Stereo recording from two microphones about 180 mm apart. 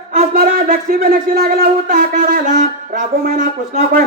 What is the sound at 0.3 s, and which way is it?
Speech, 50° right (ahead or behind).